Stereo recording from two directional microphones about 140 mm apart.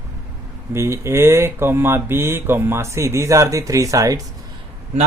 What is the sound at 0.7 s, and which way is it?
Speech, 20° right (ahead or behind).